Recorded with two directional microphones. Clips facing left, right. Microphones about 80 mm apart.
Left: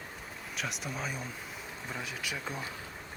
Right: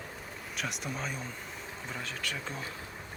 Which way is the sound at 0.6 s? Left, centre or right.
Centre.